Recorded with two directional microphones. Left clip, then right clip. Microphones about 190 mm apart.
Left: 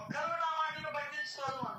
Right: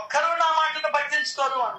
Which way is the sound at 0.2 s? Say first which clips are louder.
Right 13 dB; 40° right (ahead or behind).